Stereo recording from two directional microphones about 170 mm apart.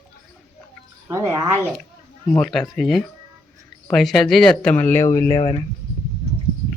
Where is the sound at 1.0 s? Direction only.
15° right (ahead or behind).